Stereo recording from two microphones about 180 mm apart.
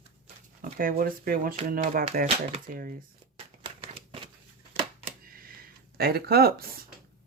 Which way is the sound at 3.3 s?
30° right (ahead or behind).